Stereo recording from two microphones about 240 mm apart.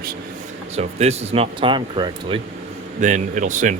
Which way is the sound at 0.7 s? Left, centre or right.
Right.